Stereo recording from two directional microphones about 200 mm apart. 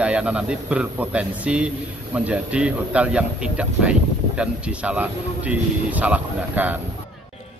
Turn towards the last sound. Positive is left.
turn(degrees=-10)  # may be behind; listen again after turning